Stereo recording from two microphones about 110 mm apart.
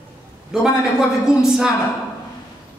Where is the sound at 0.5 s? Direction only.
5° right (ahead or behind).